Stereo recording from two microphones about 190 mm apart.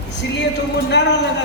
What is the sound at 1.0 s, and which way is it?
Music, 65° left (ahead or behind).